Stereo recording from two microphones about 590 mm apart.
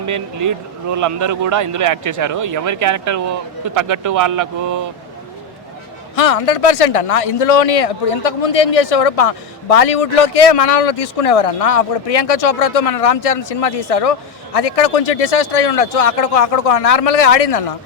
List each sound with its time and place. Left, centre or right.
0.0 s speech: right
6.1 s speech: left